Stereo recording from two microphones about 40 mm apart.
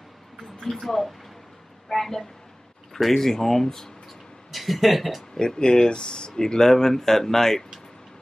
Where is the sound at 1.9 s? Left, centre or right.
Centre.